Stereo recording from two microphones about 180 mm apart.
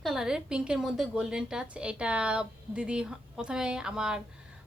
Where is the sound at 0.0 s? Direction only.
Centre (ahead or behind).